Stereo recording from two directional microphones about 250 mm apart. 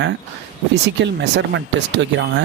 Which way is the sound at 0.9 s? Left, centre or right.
Right.